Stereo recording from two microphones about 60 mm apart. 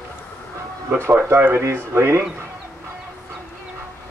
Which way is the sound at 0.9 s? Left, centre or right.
Right.